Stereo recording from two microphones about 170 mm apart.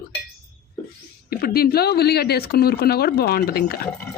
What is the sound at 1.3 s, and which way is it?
Speech, 65° left (ahead or behind).